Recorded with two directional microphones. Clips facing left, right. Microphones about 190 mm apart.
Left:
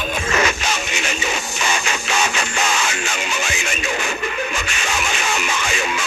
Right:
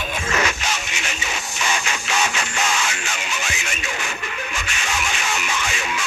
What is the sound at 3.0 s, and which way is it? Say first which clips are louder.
Music: left 5 dB; 90° left.